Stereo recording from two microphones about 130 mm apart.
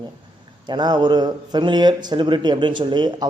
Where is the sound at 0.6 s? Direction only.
35° right (ahead or behind).